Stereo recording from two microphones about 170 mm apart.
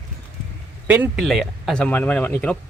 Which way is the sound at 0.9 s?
10° right (ahead or behind).